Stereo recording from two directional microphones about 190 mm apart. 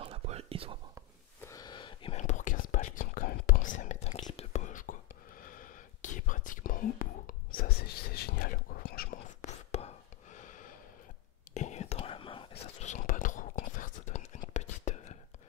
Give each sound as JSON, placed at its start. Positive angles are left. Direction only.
{"t": 0.0, "sound": "whispering", "side_deg": -35}
{"t": 1.4, "sound": "whispering", "side_deg": 20}
{"t": 12.9, "sound": "whispering", "side_deg": 45}